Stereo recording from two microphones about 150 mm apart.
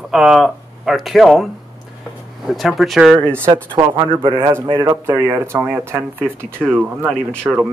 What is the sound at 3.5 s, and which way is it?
Speech, 35° right (ahead or behind).